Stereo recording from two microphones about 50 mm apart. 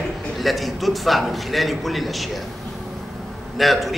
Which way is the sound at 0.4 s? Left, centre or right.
Centre.